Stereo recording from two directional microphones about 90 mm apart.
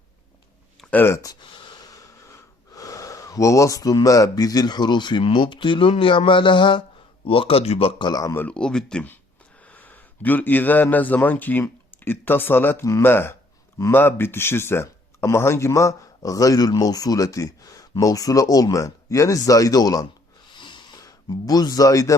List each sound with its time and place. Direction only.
0.8 s a sound: centre (ahead or behind)
1.2 s speech: 50° left (ahead or behind)
7.3 s speech: 90° left
8.1 s speech: 40° left (ahead or behind)
8.4 s a man's voice: 10° left (ahead or behind); by 20.1 s 45° left (ahead or behind)
20.5 s a sound: 60° left (ahead or behind); by 22.1 s 40° left (ahead or behind)